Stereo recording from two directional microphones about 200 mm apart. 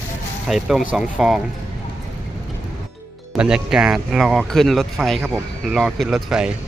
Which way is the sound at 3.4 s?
5° right (ahead or behind).